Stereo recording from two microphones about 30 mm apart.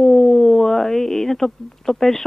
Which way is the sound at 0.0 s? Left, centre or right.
Centre.